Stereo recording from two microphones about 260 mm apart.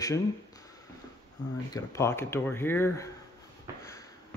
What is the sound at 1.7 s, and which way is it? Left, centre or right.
Speech, centre.